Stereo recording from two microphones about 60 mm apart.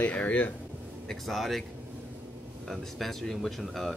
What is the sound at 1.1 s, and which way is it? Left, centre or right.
Speech, centre.